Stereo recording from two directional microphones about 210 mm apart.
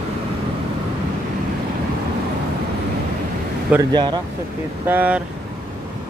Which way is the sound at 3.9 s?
20° right (ahead or behind).